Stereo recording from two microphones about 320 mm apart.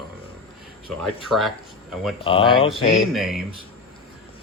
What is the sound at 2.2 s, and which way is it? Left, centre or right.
Speech, centre.